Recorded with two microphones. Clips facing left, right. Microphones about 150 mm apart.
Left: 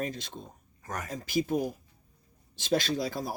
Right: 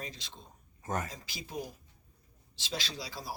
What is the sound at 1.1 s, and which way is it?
Speech, 50° left (ahead or behind).